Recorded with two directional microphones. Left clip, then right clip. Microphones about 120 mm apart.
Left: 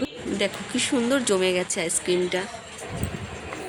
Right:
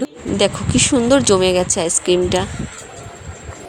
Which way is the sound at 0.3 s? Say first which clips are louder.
Right 10 dB; 40° right (ahead or behind).